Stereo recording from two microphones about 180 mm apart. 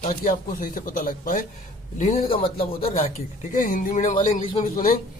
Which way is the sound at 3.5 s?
50° left (ahead or behind).